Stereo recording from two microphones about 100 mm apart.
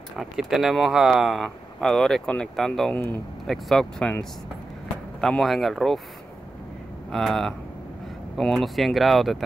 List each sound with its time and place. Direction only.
0.2 s speech: 5° right (ahead or behind)
2.9 s speech: 20° left (ahead or behind)
3.4 s speech: 5° left (ahead or behind)
5.2 s speech: 5° left (ahead or behind)
7.1 s speech: centre (ahead or behind)